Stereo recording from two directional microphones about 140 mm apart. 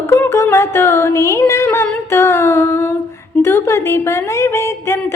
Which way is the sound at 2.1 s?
15° left (ahead or behind).